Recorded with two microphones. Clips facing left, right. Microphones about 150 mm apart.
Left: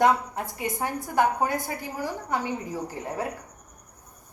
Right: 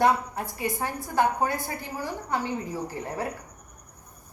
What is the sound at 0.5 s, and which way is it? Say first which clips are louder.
A woman's voice: even; 20° left (ahead or behind).